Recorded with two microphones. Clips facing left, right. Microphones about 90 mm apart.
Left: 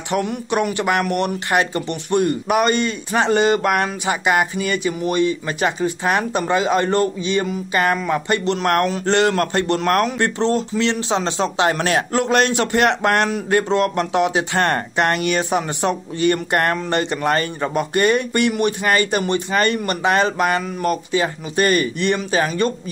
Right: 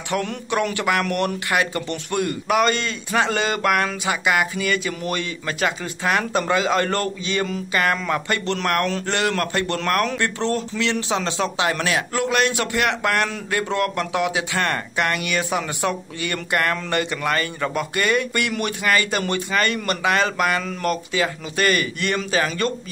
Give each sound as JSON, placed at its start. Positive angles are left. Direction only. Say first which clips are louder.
{"t": 0.1, "sound": "a man's voice", "louder": "left 3 dB", "side_deg": 20}